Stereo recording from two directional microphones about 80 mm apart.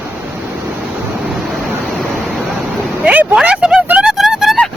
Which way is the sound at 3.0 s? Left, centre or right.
Centre.